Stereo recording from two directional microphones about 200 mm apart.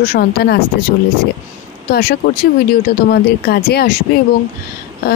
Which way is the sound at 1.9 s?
50° left (ahead or behind).